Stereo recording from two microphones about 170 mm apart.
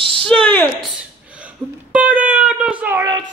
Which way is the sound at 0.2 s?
5° left (ahead or behind).